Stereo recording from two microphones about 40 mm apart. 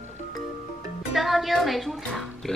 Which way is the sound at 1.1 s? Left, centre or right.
Centre.